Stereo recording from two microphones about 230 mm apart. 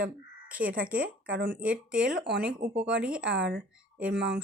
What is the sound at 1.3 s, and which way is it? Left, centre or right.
Speech, right.